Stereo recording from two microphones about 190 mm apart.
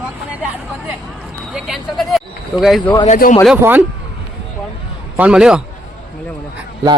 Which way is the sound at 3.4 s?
10° right (ahead or behind).